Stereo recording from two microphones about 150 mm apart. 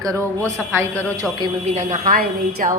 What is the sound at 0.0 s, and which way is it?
A woman's voice, 20° right (ahead or behind).